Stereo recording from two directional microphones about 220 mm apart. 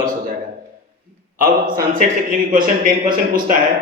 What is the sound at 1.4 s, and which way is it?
A man's voice, 40° right (ahead or behind).